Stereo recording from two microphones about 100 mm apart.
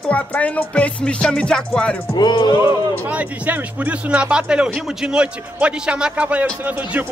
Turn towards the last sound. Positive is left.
turn(degrees=-15)  # may be behind; listen again after turning